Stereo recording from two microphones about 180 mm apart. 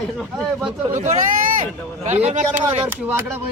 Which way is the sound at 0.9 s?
45° right (ahead or behind).